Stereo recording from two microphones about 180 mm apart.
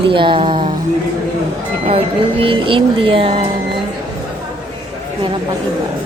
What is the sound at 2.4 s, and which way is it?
Music, 30° right (ahead or behind).